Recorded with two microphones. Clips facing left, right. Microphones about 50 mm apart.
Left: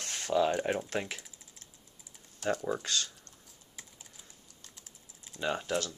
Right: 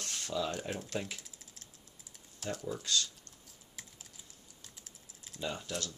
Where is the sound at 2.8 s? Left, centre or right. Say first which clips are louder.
Even; left.